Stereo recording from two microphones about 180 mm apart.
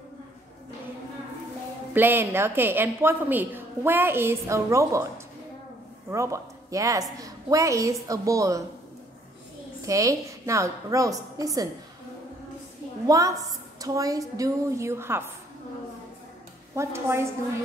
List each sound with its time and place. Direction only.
2.0 s a woman's voice: 10° right (ahead or behind)
9.8 s a woman's voice: 20° right (ahead or behind)
13.0 s a woman's voice: 20° right (ahead or behind)
16.7 s a woman's voice: 15° right (ahead or behind)